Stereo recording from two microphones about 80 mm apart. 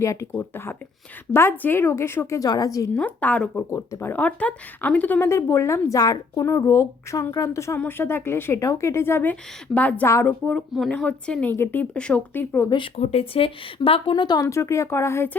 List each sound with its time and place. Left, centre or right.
0.0 s speech: left
2.4 s a woman's voice: left
2.9 s a woman's voice: centre
5.3 s speech: left
5.9 s a woman's voice: left
6.4 s speech: left
7.8 s speech: left
9.3 s a woman's voice: centre
10.8 s a woman's voice: centre
11.5 s speech: left
11.9 s a woman's voice: centre
12.7 s speech: left
13.7 s speech: left
14.5 s speech: left